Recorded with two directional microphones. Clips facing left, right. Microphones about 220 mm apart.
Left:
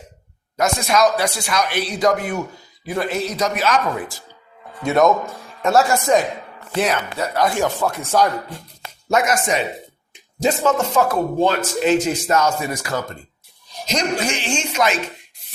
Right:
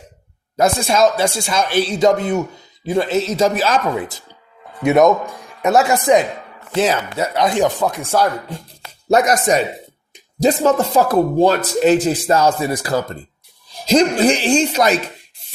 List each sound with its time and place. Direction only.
0.5 s speech: 30° right (ahead or behind)
5.0 s speech: 15° right (ahead or behind)
9.0 s a man's voice: 35° right (ahead or behind)